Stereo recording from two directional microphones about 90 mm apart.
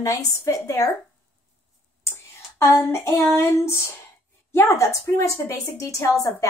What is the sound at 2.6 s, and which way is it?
A woman's voice, 25° left (ahead or behind).